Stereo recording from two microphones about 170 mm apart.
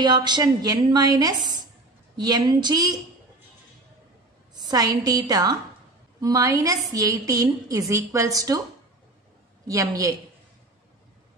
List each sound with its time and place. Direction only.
0.0 s a woman's voice: 25° right (ahead or behind)
4.6 s a woman's voice: 20° right (ahead or behind)
9.7 s a woman's voice: 20° right (ahead or behind)